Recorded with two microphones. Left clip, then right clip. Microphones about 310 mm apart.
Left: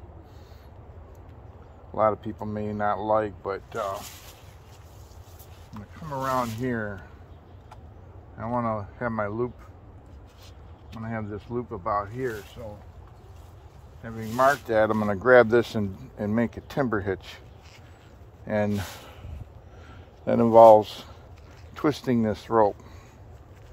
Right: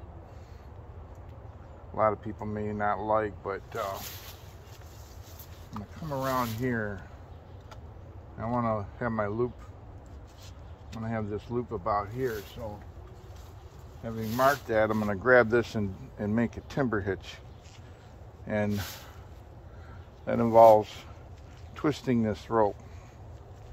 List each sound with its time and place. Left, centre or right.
2.0 s speech: left
4.0 s speech: centre
6.0 s speech: left
8.4 s speech: centre
11.0 s speech: centre
14.0 s speech: centre
14.3 s speech: left
18.5 s speech: centre
20.2 s speech: left